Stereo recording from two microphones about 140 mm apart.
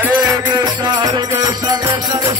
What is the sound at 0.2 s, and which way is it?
Music, 30° right (ahead or behind).